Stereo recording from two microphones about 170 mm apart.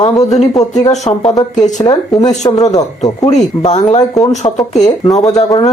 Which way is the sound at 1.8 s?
25° left (ahead or behind).